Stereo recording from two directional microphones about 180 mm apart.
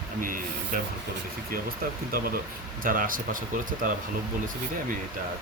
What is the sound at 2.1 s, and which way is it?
Speech, 55° right (ahead or behind).